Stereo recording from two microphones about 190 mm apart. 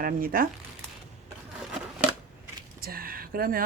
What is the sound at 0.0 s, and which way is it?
Speech, 50° right (ahead or behind).